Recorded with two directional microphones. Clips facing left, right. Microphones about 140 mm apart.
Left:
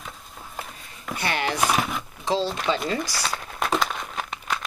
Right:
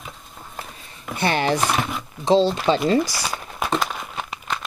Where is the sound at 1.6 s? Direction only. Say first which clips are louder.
Right 1 dB; centre (ahead or behind).